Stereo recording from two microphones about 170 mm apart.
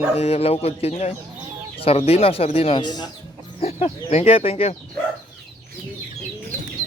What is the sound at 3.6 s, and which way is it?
Speech, 35° left (ahead or behind).